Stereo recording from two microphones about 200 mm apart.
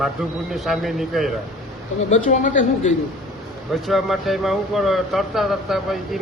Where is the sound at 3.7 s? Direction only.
Centre (ahead or behind).